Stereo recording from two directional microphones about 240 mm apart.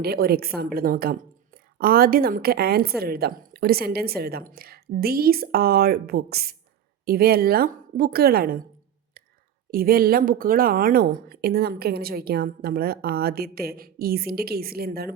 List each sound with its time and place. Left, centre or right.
0.0 s a woman's voice: right
9.7 s a woman's voice: right